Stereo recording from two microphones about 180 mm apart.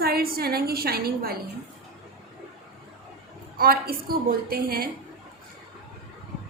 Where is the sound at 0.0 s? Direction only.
55° right (ahead or behind).